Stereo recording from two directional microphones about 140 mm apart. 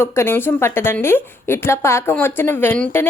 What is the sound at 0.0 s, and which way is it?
A woman's voice, 20° left (ahead or behind).